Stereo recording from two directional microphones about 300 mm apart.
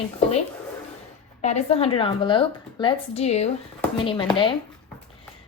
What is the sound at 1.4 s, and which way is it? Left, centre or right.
A woman's voice, left.